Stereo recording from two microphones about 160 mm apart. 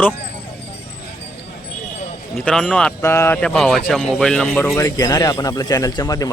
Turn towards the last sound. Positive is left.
turn(degrees=25)  # may be behind; listen again after turning